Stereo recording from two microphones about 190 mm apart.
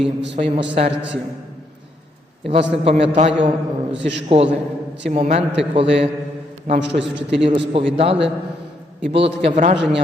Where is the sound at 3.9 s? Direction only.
65° right (ahead or behind).